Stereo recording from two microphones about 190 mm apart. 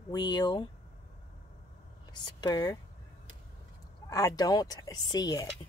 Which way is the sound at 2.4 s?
20° left (ahead or behind).